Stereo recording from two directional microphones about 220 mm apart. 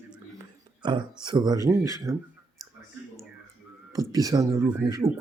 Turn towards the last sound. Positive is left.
turn(degrees=-10)  # may be behind; listen again after turning